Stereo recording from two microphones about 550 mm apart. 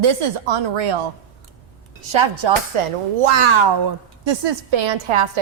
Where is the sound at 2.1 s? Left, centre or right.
Right.